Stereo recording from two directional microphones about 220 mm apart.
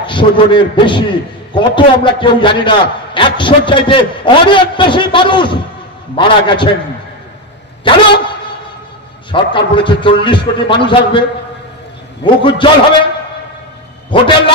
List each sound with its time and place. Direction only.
0.0 s a man's voice: 20° left (ahead or behind)
7.9 s a man's voice: 25° left (ahead or behind)
9.3 s a man's voice: 20° left (ahead or behind)
12.4 s a man's voice: 20° left (ahead or behind)
14.1 s a man's voice: 25° left (ahead or behind)